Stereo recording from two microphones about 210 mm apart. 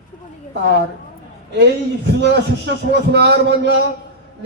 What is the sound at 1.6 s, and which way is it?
A man's voice, 50° right (ahead or behind).